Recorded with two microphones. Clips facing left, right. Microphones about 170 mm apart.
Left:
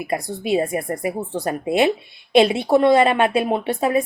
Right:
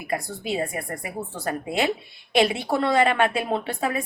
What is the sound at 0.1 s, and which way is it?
A woman's voice, 20° left (ahead or behind).